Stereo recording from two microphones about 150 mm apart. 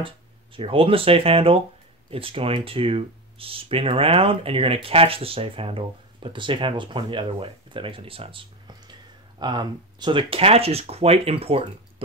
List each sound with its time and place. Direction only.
0.6 s speech: 35° right (ahead or behind)